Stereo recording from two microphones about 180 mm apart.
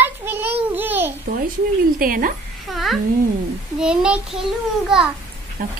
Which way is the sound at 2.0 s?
50° right (ahead or behind).